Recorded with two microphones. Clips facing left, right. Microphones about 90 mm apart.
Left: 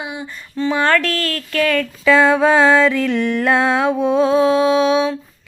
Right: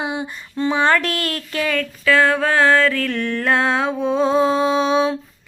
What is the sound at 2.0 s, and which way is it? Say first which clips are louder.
Music: left 4 dB; 15° left (ahead or behind).